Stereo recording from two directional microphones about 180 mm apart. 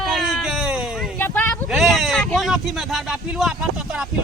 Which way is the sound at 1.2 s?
10° left (ahead or behind).